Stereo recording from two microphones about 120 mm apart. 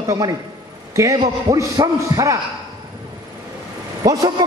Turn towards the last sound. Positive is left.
turn(degrees=-30)  # may be behind; listen again after turning